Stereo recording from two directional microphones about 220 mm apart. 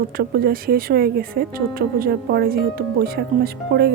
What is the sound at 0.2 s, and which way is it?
Speech, 45° right (ahead or behind).